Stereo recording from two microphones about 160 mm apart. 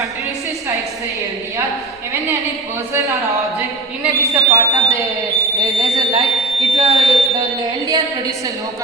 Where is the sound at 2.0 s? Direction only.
20° right (ahead or behind).